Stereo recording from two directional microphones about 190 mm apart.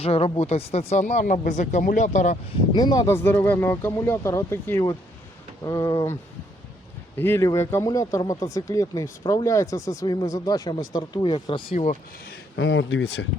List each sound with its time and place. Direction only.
0.0 s speech: 30° left (ahead or behind)
2.7 s speech: 20° left (ahead or behind)
7.2 s speech: 10° left (ahead or behind); by 11.9 s 30° left (ahead or behind)
12.5 s speech: 80° left